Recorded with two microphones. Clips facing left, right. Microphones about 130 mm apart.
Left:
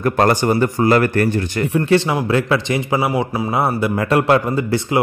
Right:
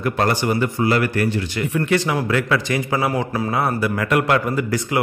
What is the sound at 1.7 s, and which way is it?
A man's voice, 30° left (ahead or behind).